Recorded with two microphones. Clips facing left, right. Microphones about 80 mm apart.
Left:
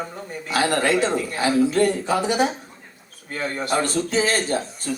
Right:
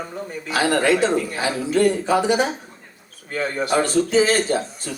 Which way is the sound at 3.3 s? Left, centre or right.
Left.